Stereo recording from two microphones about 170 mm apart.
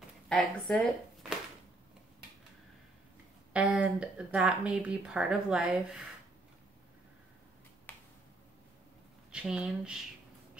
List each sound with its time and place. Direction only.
0.3 s speech: 5° left (ahead or behind)
3.5 s speech: 10° right (ahead or behind)
7.9 s finger snapping: 10° left (ahead or behind)
9.3 s speech: 5° right (ahead or behind)